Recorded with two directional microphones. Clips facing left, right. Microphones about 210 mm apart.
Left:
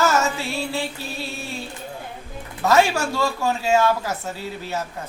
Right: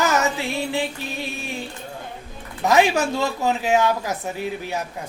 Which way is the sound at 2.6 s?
15° right (ahead or behind).